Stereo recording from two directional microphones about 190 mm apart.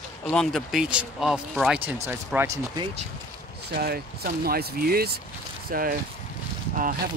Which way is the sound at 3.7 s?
55° right (ahead or behind).